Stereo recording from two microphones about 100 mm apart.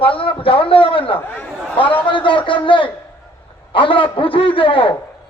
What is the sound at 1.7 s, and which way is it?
A man's voice, 60° left (ahead or behind).